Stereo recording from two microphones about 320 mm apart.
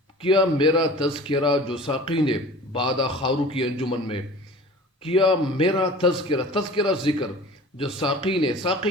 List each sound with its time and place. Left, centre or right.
0.2 s a man's voice: centre
7.9 s a man's voice: centre